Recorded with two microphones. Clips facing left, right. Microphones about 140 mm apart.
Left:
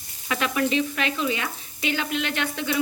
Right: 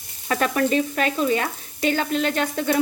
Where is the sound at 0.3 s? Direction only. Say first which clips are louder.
Right 3 dB; 40° right (ahead or behind).